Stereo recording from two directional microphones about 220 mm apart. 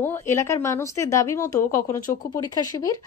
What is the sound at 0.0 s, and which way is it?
A woman's voice, 10° left (ahead or behind).